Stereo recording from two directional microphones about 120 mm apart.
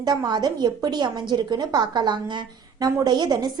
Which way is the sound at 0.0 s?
35° right (ahead or behind).